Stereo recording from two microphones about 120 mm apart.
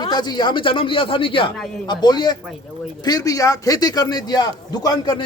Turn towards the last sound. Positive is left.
turn(degrees=35)  # may be behind; listen again after turning